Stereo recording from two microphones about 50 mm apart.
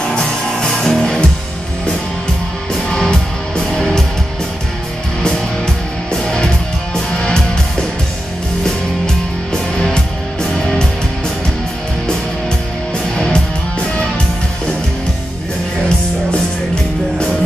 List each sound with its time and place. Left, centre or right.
0.1 s music: centre
3.0 s music: centre
6.2 s music: centre
8.6 s music: centre
13.1 s music: centre